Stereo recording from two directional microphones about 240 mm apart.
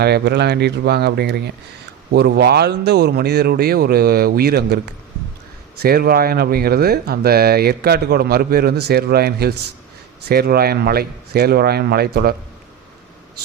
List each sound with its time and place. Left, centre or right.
0.0 s speech: right
5.8 s speech: right